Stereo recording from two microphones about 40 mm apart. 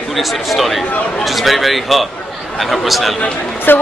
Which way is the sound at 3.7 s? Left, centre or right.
Left.